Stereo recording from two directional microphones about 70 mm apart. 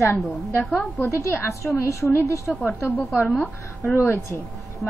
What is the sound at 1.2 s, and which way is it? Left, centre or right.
A woman's voice, left.